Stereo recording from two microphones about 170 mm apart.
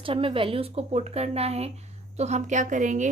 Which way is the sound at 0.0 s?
30° right (ahead or behind).